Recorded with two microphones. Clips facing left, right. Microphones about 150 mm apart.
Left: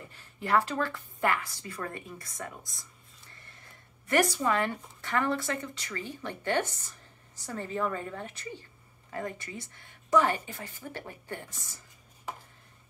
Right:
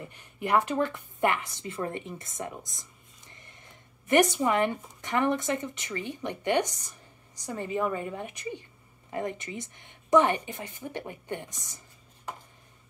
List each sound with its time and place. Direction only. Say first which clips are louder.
0.0 s a woman's voice: right 4 dB; 20° right (ahead or behind)